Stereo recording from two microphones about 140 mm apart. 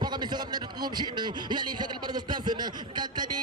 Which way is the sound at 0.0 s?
30° right (ahead or behind).